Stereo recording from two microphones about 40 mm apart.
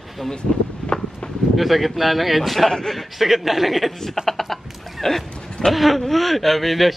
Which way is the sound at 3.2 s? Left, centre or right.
Centre.